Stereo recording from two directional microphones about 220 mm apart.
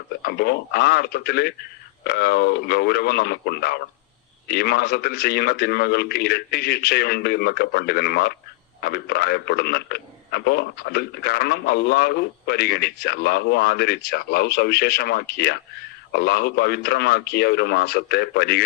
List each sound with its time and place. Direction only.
0.1 s speech: 45° left (ahead or behind)